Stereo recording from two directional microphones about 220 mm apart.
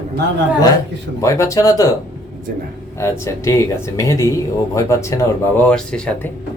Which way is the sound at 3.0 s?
15° left (ahead or behind).